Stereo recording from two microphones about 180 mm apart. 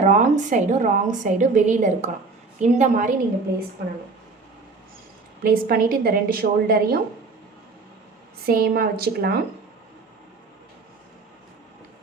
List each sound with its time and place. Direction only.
0.0 s a woman's voice: 40° right (ahead or behind)
5.4 s a woman's voice: 55° right (ahead or behind)
8.4 s a woman's voice: 55° right (ahead or behind)